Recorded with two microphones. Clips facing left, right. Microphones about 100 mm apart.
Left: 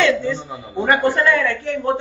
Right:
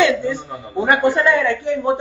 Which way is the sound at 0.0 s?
15° right (ahead or behind).